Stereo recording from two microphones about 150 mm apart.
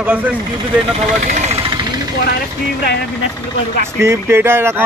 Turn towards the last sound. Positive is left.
turn(degrees=-15)  # may be behind; listen again after turning